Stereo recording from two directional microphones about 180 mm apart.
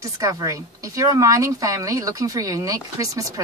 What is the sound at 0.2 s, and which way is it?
Speech, 20° right (ahead or behind).